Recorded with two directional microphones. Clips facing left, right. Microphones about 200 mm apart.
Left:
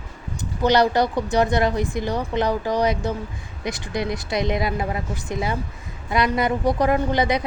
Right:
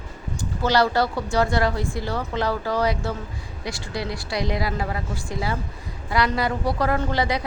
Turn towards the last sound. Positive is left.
turn(degrees=20)  # may be behind; listen again after turning